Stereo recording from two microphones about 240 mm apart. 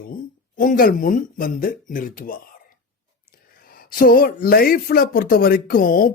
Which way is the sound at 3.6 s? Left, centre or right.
Left.